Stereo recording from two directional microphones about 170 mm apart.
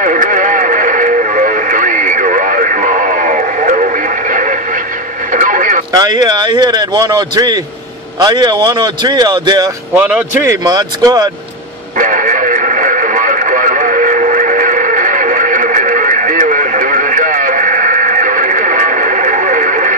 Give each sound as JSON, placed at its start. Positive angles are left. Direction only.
{"t": 0.0, "sound": "radio", "side_deg": -50}
{"t": 5.9, "sound": "speech", "side_deg": -25}
{"t": 9.9, "sound": "a man's voice", "side_deg": -10}
{"t": 10.5, "sound": "speech", "side_deg": -25}
{"t": 12.0, "sound": "radio", "side_deg": -50}